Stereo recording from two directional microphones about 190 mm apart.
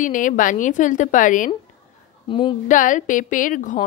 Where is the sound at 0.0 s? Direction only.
45° left (ahead or behind).